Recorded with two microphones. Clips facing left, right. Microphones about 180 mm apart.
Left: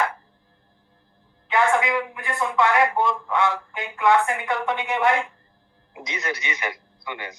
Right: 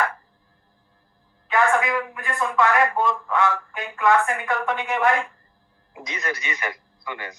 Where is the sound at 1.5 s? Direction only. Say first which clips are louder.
Even; 20° left (ahead or behind).